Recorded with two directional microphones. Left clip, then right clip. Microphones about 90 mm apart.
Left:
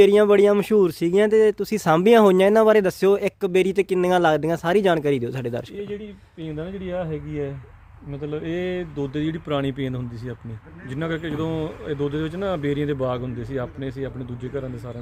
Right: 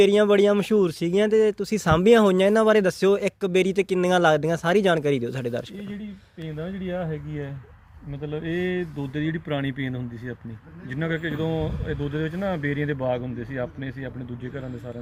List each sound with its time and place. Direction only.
0.0 s speech: 35° left (ahead or behind)
6.8 s speech: 40° left (ahead or behind)